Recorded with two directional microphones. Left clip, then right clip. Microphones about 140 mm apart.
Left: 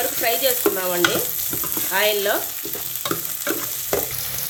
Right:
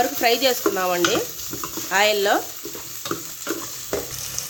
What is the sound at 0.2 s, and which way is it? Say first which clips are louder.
Stir: left 1 dB; 60° right (ahead or behind).